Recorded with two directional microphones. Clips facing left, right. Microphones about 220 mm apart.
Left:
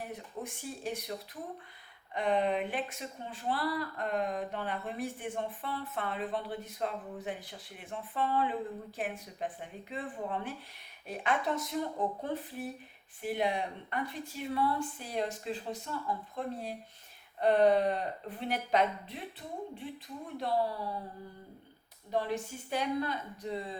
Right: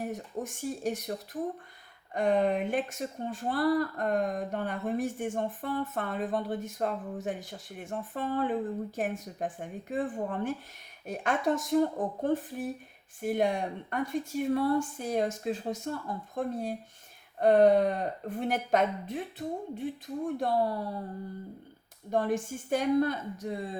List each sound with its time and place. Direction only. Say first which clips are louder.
0.0 s speech: right 6 dB; 45° right (ahead or behind)
22.1 s speech: right 5 dB; 50° right (ahead or behind)